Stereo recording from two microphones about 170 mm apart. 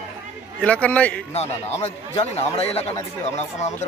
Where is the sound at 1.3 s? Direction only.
40° left (ahead or behind).